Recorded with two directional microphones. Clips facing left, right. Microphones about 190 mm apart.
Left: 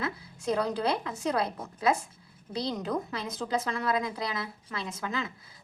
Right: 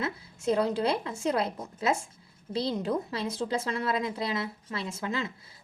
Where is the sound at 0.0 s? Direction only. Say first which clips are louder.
Right 2 dB; 25° right (ahead or behind).